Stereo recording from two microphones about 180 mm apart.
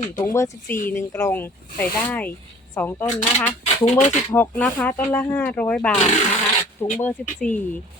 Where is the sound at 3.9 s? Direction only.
45° left (ahead or behind).